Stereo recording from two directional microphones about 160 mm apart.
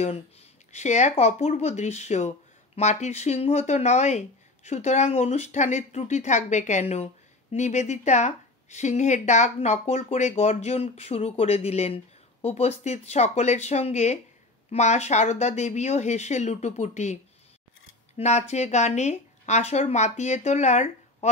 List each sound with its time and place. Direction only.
0.7 s a woman's voice: 45° left (ahead or behind)